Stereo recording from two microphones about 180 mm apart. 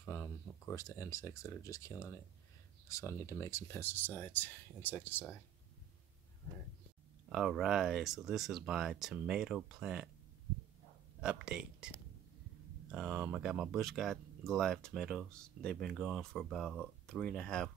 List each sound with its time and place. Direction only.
0.0 s speech: 15° left (ahead or behind)
7.2 s speech: centre (ahead or behind)
11.1 s speech: 5° right (ahead or behind)
12.9 s speech: 10° right (ahead or behind)